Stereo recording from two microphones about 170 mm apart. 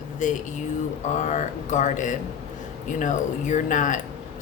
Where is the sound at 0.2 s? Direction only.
50° left (ahead or behind).